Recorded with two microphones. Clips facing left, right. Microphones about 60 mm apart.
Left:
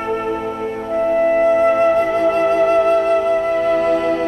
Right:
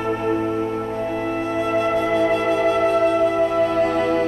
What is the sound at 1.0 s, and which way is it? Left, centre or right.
Music, left.